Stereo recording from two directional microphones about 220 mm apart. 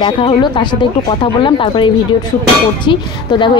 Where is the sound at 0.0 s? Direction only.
25° left (ahead or behind).